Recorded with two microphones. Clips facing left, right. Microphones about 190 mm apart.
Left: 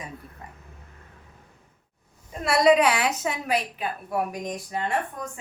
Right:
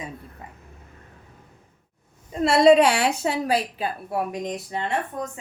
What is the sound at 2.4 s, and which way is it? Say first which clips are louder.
A woman's voice: right 4 dB; 25° right (ahead or behind).